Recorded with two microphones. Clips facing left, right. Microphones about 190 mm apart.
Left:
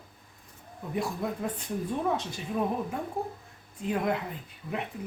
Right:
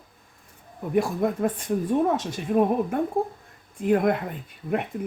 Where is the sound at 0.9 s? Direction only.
55° right (ahead or behind).